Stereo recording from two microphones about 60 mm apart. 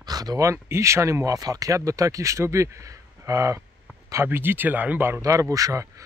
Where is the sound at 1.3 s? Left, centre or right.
Right.